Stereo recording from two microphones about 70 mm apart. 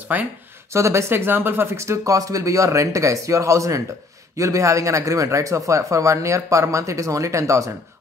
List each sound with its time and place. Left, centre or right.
0.1 s speech: right
0.7 s speech: right